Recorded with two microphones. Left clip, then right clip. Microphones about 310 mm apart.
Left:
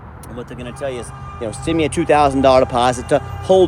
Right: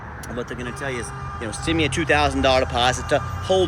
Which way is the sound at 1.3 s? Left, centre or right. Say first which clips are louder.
Left 4 dB; centre.